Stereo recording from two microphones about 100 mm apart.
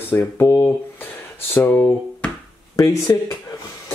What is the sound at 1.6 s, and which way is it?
Speech, 20° left (ahead or behind).